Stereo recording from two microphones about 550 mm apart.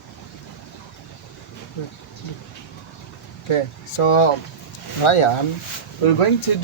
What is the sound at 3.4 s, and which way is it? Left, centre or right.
Speech, left.